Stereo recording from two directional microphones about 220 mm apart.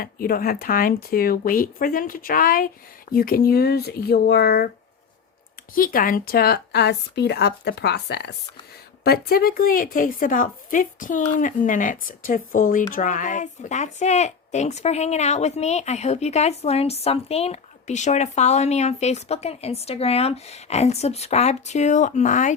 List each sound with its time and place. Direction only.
0.0 s a woman's voice: 40° left (ahead or behind)
5.7 s a woman's voice: 40° left (ahead or behind)